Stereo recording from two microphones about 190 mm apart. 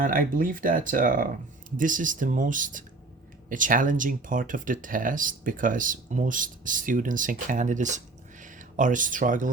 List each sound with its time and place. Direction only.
0.0 s speech: 45° right (ahead or behind)